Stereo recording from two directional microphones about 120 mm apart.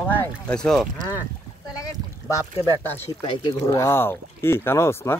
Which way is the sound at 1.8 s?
30° left (ahead or behind).